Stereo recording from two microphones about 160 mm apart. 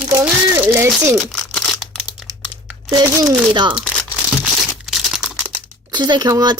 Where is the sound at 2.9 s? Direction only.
25° right (ahead or behind).